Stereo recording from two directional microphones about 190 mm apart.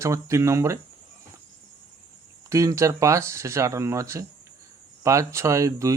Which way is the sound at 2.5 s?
15° right (ahead or behind).